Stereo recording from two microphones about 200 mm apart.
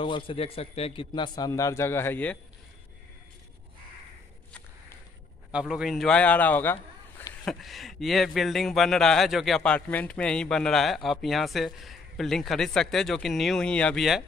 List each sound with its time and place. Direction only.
0.0 s a man's voice: 25° left (ahead or behind); by 2.3 s 10° left (ahead or behind)
4.5 s walk: 10° left (ahead or behind)
5.5 s a man's voice: 5° right (ahead or behind)